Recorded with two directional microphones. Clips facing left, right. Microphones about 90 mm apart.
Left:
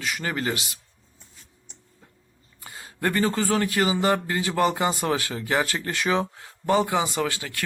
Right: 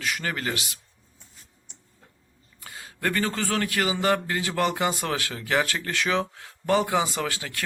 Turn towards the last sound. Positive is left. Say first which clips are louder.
# left 3 dB
turn(degrees=0)  # may be behind; listen again after turning